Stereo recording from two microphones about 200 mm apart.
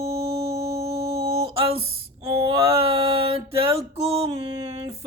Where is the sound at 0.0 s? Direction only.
30° right (ahead or behind).